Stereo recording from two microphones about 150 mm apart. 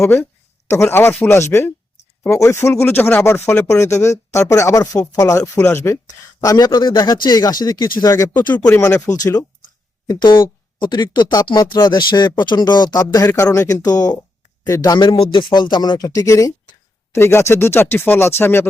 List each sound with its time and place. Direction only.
0.0 s speech: 20° left (ahead or behind)
8.7 s speech: 10° left (ahead or behind)
10.1 s speech: 30° left (ahead or behind)